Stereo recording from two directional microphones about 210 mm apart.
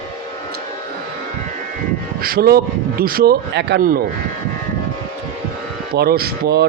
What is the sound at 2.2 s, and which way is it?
Speech, 45° right (ahead or behind).